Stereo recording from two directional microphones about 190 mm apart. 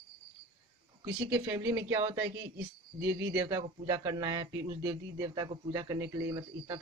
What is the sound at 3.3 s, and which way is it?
Speech, 20° right (ahead or behind).